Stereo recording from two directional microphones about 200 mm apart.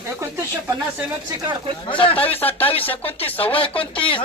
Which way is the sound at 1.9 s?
25° left (ahead or behind).